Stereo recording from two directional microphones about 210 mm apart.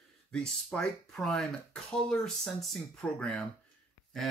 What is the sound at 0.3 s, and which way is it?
Speech, 5° left (ahead or behind).